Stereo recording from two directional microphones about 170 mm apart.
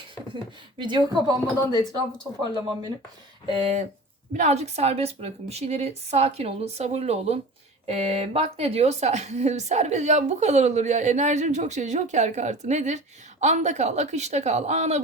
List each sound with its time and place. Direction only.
0.8 s a woman's voice: 25° right (ahead or behind)
1.5 s speech: 20° left (ahead or behind)
3.5 s a woman's voice: 35° right (ahead or behind)